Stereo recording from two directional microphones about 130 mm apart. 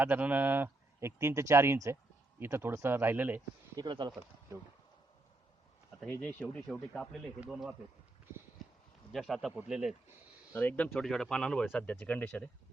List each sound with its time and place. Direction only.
0.0 s speech: 10° right (ahead or behind)
3.8 s speech: 35° right (ahead or behind)
6.1 s speech: 15° left (ahead or behind); by 7.8 s 5° right (ahead or behind)
8.6 s a sound: centre (ahead or behind)
9.1 s speech: centre (ahead or behind)
10.5 s speech: 15° left (ahead or behind)
10.9 s speech: 5° left (ahead or behind)